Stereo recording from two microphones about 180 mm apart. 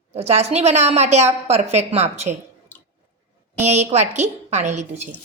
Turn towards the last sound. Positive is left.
turn(degrees=-40)  # may be behind; listen again after turning